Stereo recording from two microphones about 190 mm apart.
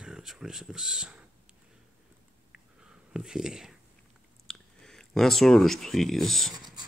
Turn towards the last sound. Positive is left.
turn(degrees=0)  # may be behind; listen again after turning